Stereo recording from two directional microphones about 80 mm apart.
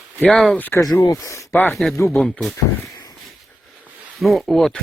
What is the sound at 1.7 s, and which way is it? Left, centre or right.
Speech, centre.